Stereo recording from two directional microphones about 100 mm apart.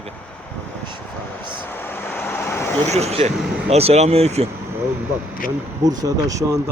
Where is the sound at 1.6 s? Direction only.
20° left (ahead or behind).